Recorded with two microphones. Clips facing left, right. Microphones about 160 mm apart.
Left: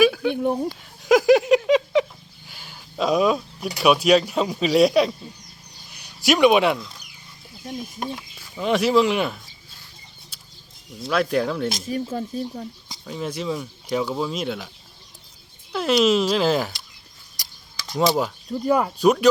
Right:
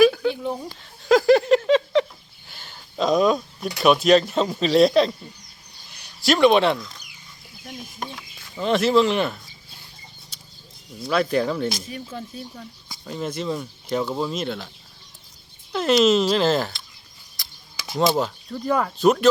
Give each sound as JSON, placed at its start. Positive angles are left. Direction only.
{"t": 0.0, "sound": "a sound", "side_deg": 0}
{"t": 0.3, "sound": "speech", "side_deg": 45}
{"t": 1.0, "sound": "a sound", "side_deg": 15}
{"t": 3.9, "sound": "speech", "side_deg": 5}
{"t": 6.2, "sound": "speech", "side_deg": 15}
{"t": 11.1, "sound": "speech", "side_deg": 0}
{"t": 11.9, "sound": "speech", "side_deg": 40}
{"t": 13.1, "sound": "speech", "side_deg": 0}
{"t": 15.7, "sound": "speech", "side_deg": 5}
{"t": 17.7, "sound": "a sound", "side_deg": -10}
{"t": 18.2, "sound": "speech", "side_deg": 15}